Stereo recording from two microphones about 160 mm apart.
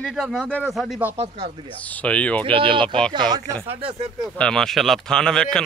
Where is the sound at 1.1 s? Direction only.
35° right (ahead or behind).